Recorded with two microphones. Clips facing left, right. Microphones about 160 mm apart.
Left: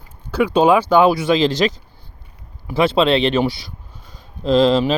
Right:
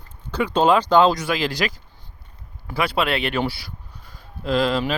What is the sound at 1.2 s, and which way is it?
Speech, 20° left (ahead or behind).